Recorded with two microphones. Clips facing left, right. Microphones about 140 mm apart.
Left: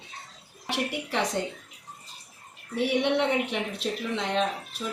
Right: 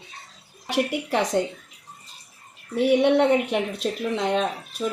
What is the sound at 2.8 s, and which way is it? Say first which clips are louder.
Speech: right 7 dB; 45° right (ahead or behind).